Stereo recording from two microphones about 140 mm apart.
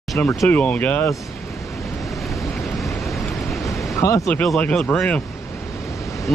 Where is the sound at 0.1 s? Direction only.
Centre (ahead or behind).